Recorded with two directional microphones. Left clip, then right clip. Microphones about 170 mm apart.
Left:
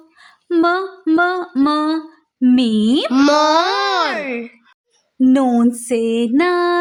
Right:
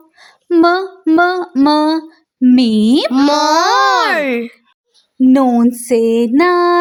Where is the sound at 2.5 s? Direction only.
30° right (ahead or behind).